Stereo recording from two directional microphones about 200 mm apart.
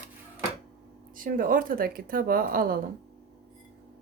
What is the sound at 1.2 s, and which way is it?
Speech, 45° right (ahead or behind).